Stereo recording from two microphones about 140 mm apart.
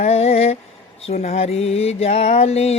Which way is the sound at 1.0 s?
50° left (ahead or behind).